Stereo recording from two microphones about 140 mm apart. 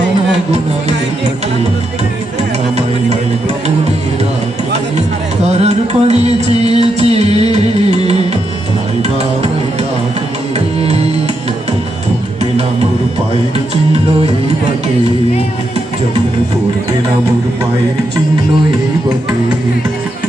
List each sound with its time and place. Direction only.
5.5 s music: 50° right (ahead or behind)